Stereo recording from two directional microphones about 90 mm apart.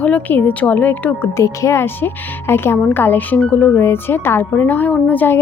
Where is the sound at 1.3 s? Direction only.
35° left (ahead or behind).